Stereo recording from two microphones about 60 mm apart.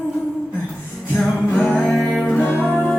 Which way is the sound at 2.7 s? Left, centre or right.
Left.